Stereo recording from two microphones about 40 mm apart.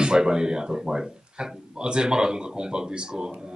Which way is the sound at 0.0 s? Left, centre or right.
Centre.